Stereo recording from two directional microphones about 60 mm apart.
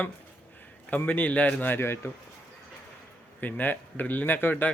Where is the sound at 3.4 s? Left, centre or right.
Left.